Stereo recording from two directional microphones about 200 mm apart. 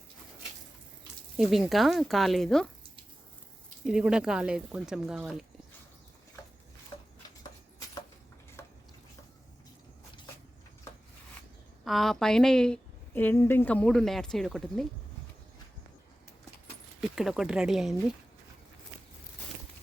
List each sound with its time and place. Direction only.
1.4 s a woman's voice: centre (ahead or behind)
3.8 s a woman's voice: 5° right (ahead or behind)
6.9 s a sound: 25° left (ahead or behind)
8.6 s stir: 10° left (ahead or behind)
11.9 s a woman's voice: centre (ahead or behind)
17.2 s a woman's voice: centre (ahead or behind)